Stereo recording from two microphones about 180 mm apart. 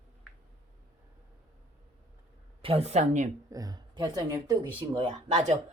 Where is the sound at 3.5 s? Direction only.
20° right (ahead or behind).